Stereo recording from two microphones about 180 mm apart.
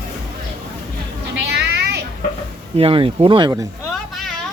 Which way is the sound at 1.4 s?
70° right (ahead or behind).